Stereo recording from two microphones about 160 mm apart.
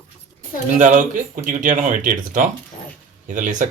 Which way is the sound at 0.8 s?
50° right (ahead or behind).